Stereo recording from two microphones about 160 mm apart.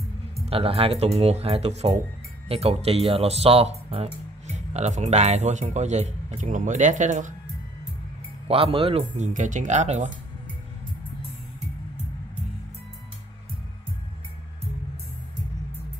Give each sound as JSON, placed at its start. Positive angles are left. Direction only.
{"t": 0.5, "sound": "speech", "side_deg": -35}
{"t": 8.5, "sound": "speech", "side_deg": -35}
{"t": 9.1, "sound": "speech", "side_deg": -50}